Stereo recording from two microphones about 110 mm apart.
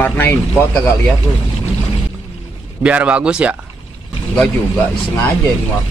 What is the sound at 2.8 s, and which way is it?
Speech, 10° right (ahead or behind).